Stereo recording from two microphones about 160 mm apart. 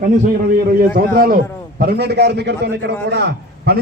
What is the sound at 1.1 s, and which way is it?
A man's voice, 65° right (ahead or behind).